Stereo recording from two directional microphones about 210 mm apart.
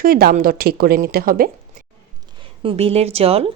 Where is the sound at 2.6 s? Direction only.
30° right (ahead or behind).